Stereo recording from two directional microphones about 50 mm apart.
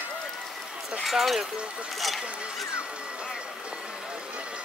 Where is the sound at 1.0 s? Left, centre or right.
Centre.